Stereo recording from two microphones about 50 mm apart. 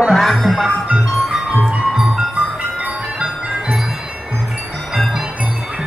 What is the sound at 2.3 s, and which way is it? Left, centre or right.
Music, right.